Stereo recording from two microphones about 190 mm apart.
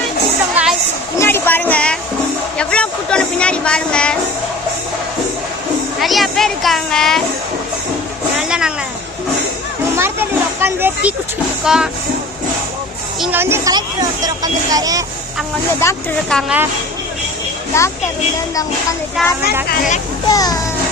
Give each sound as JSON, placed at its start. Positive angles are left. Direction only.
{"t": 0.5, "sound": "a sound", "side_deg": -5}
{"t": 1.2, "sound": "a sound", "side_deg": 10}
{"t": 2.6, "sound": "speech", "side_deg": 5}
{"t": 6.0, "sound": "a child's voice", "side_deg": 0}
{"t": 8.4, "sound": "a child's voice", "side_deg": -5}
{"t": 10.0, "sound": "a sound", "side_deg": -10}
{"t": 11.6, "sound": "a child's voice", "side_deg": -5}
{"t": 13.1, "sound": "speech", "side_deg": -5}
{"t": 15.8, "sound": "speech", "side_deg": 15}
{"t": 16.3, "sound": "a child's voice", "side_deg": -5}
{"t": 19.2, "sound": "a child's voice", "side_deg": 0}
{"t": 20.3, "sound": "speech", "side_deg": 20}